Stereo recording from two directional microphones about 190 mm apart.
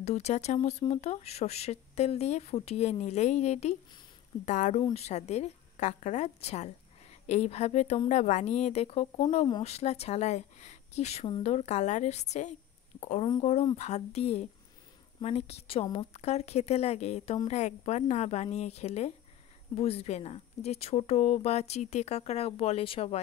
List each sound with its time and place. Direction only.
0.0 s a woman's voice: 35° left (ahead or behind)